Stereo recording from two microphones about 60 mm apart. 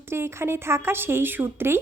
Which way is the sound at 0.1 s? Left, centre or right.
Right.